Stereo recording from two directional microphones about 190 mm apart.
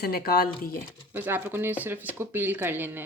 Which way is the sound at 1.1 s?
10° right (ahead or behind).